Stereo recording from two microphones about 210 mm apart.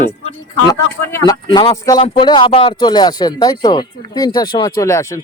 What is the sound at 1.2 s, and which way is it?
Speech, 20° left (ahead or behind).